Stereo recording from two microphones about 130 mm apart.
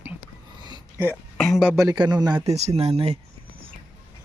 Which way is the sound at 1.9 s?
35° right (ahead or behind).